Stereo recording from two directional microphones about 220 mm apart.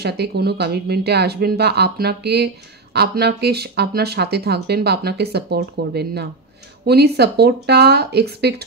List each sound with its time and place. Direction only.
0.0 s a woman's voice: 45° right (ahead or behind)